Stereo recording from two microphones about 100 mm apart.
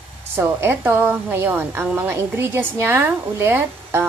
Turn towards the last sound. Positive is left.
turn(degrees=-25)  # may be behind; listen again after turning